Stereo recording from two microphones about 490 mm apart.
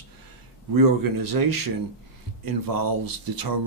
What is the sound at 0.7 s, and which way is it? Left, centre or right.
Speech, right.